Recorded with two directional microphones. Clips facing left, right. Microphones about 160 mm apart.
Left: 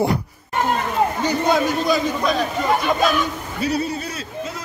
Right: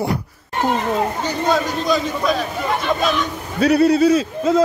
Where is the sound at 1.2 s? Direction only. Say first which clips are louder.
Left 1 dB; 15° left (ahead or behind).